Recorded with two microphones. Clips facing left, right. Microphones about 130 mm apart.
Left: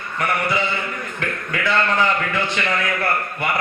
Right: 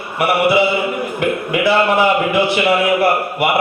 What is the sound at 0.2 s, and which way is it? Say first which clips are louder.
A man's voice: right 8 dB; 10° right (ahead or behind).